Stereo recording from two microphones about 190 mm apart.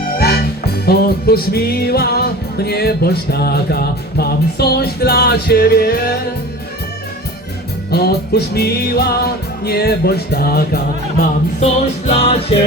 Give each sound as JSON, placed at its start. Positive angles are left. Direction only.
{"t": 0.2, "sound": "music", "side_deg": 55}
{"t": 7.9, "sound": "music", "side_deg": 55}
{"t": 11.6, "sound": "music", "side_deg": 35}